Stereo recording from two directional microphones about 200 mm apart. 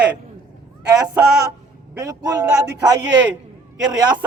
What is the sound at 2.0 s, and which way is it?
Speech, 15° right (ahead or behind).